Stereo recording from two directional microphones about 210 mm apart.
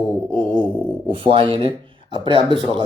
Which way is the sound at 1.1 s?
25° right (ahead or behind).